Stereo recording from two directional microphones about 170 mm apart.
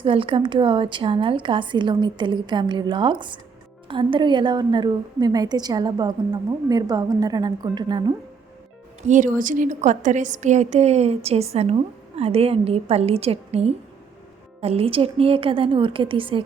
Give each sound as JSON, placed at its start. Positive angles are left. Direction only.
{"t": 0.0, "sound": "a woman's voice", "side_deg": -30}
{"t": 9.0, "sound": "a woman's voice", "side_deg": -45}